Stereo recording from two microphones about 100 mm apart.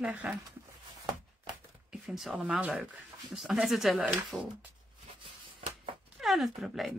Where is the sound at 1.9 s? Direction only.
5° right (ahead or behind).